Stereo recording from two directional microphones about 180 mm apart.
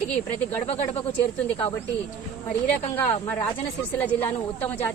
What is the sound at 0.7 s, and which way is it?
Speech, 35° left (ahead or behind).